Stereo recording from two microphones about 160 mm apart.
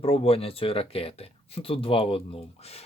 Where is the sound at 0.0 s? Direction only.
40° left (ahead or behind).